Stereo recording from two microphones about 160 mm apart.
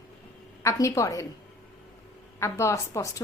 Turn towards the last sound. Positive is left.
turn(degrees=20)  # may be behind; listen again after turning